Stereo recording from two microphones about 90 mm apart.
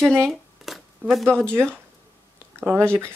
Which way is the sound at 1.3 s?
25° right (ahead or behind).